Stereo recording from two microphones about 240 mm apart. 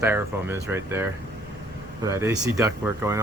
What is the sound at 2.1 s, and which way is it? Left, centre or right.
Speech, centre.